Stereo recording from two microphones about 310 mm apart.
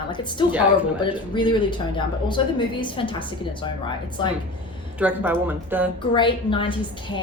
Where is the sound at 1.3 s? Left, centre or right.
Centre.